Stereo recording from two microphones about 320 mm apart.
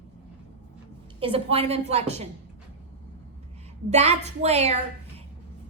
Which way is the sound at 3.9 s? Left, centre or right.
Centre.